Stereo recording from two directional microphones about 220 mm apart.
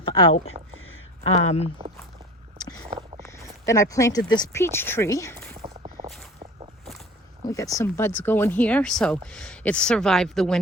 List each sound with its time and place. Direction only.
0.0 s speech: 20° left (ahead or behind)
3.2 s speech: 15° left (ahead or behind)
5.6 s a sound: 25° right (ahead or behind)
7.4 s speech: 15° left (ahead or behind)